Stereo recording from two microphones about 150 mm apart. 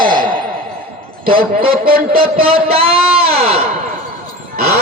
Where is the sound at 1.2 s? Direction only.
75° right (ahead or behind).